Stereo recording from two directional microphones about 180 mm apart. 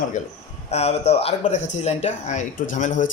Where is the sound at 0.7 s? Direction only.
35° left (ahead or behind).